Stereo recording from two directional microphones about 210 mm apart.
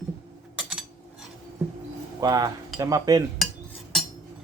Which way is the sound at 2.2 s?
20° right (ahead or behind).